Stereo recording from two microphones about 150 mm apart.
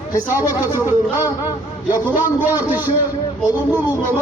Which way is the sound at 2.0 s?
15° right (ahead or behind).